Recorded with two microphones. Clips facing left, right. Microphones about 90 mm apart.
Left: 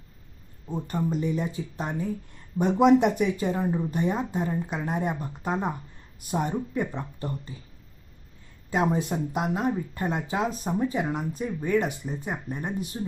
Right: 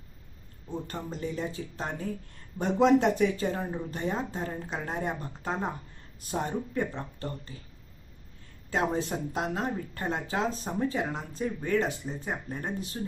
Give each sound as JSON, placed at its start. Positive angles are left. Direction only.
{"t": 0.7, "sound": "speech", "side_deg": 15}
{"t": 8.7, "sound": "speech", "side_deg": 15}